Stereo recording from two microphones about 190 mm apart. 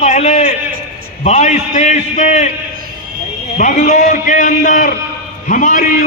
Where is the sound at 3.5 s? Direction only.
40° left (ahead or behind).